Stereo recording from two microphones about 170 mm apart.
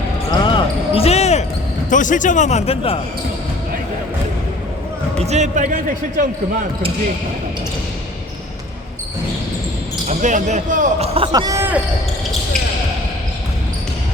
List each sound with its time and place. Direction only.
0.3 s basketball bounce: 30° left (ahead or behind)
1.9 s a man's voice: 50° left (ahead or behind)
5.2 s speech: 40° right (ahead or behind)
10.1 s speech: 45° right (ahead or behind)
11.3 s speech: 25° right (ahead or behind)